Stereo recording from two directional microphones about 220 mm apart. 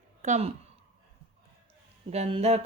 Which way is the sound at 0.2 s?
30° right (ahead or behind).